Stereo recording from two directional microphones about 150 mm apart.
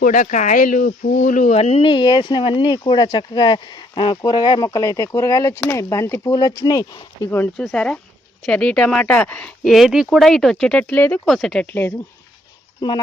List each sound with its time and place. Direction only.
0.0 s speech: 60° left (ahead or behind); by 7.0 s 25° left (ahead or behind)
7.3 s speech: 15° left (ahead or behind)